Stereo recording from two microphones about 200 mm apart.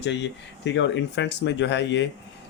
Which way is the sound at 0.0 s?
60° left (ahead or behind).